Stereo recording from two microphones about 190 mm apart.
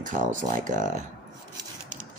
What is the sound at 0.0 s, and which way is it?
Speech, 40° right (ahead or behind).